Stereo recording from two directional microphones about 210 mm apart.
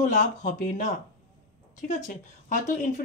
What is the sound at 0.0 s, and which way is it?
A woman's voice, 35° left (ahead or behind).